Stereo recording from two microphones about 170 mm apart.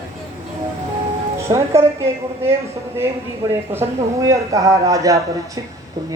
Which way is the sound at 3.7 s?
15° right (ahead or behind).